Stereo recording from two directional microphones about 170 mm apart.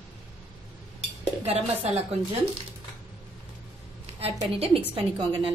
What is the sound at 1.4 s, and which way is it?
Speech, 35° right (ahead or behind).